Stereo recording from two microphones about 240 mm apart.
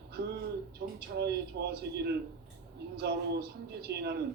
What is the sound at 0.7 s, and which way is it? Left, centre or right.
Speech, right.